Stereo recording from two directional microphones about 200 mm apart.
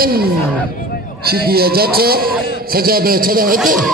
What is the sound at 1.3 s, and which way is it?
A man's voice, 50° right (ahead or behind).